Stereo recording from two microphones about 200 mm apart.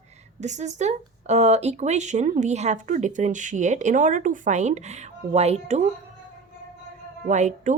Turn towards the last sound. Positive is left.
turn(degrees=-35)  # may be behind; listen again after turning